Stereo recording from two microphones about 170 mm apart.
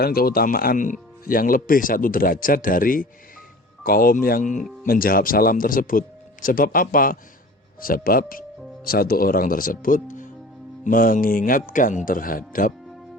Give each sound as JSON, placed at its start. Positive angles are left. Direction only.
{"t": 0.0, "sound": "speech", "side_deg": 60}